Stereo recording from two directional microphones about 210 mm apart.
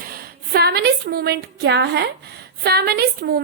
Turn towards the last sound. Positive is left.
turn(degrees=-50)  # may be behind; listen again after turning